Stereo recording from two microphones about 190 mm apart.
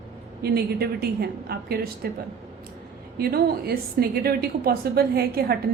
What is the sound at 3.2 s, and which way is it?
A woman's voice, 55° right (ahead or behind).